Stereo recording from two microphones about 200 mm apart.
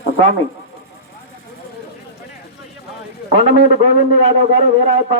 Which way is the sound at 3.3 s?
30° right (ahead or behind).